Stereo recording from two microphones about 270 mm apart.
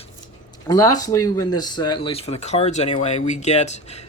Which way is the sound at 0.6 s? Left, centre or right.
Centre.